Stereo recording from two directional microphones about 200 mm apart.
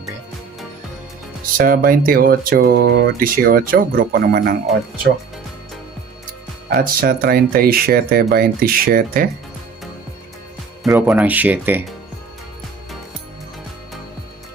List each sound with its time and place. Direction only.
1.5 s speech: 45° right (ahead or behind)
6.7 s speech: 50° right (ahead or behind)
10.8 s speech: 10° right (ahead or behind)